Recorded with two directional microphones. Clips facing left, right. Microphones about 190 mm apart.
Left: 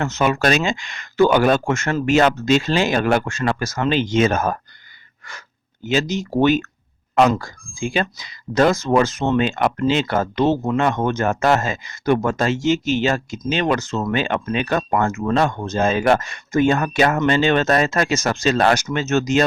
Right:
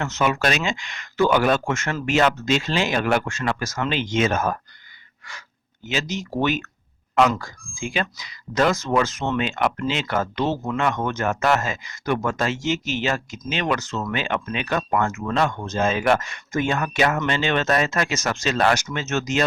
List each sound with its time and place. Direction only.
0.0 s speech: 35° left (ahead or behind)
5.9 s speech: 35° left (ahead or behind)